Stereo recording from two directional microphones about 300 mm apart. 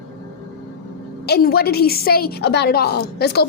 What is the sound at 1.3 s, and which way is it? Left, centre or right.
A woman's voice, left.